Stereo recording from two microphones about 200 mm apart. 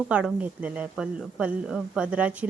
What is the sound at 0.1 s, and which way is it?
Speech, 5° right (ahead or behind).